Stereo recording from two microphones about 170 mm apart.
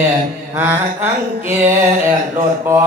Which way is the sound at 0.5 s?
10° right (ahead or behind).